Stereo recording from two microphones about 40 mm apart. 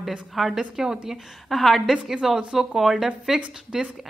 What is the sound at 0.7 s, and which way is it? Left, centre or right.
Speech, centre.